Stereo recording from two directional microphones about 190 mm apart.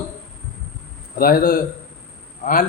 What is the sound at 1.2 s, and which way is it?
Speech, 50° left (ahead or behind).